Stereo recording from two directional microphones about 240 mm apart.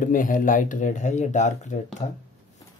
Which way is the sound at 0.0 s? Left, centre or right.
Left.